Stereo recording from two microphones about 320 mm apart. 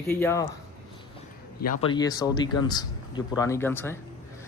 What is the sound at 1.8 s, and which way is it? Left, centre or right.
Speech, centre.